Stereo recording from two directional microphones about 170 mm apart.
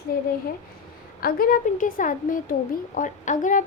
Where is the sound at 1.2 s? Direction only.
55° left (ahead or behind).